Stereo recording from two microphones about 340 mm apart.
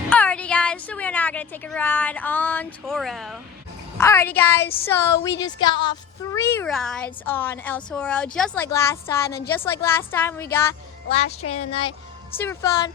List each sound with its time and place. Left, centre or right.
0.1 s a woman's voice: centre